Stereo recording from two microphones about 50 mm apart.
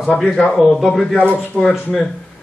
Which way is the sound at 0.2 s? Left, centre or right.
Centre.